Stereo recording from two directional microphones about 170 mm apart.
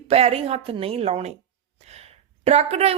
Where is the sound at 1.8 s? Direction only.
40° right (ahead or behind).